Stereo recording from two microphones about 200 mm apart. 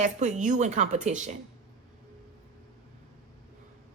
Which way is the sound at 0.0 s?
35° right (ahead or behind).